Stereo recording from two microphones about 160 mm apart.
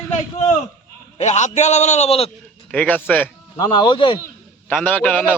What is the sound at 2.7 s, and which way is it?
Speech, 10° left (ahead or behind).